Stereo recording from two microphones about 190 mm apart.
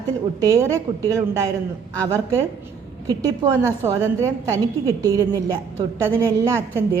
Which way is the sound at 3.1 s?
20° right (ahead or behind).